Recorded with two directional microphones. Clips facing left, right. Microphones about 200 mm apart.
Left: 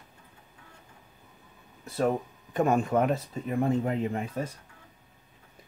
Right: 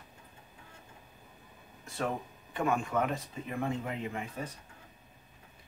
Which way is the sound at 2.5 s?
40° left (ahead or behind).